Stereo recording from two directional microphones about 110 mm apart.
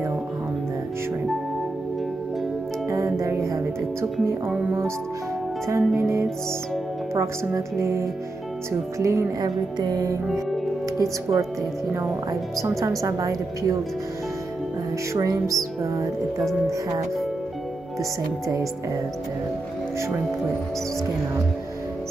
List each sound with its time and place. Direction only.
2.9 s music: 30° right (ahead or behind)
5.7 s speech: 25° right (ahead or behind)
11.0 s speech: 25° right (ahead or behind)
15.1 s speech: 30° right (ahead or behind)